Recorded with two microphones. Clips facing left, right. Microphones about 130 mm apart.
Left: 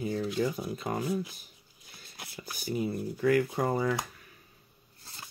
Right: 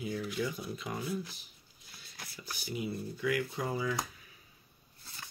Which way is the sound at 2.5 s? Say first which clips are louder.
Left 6 dB; 45° left (ahead or behind).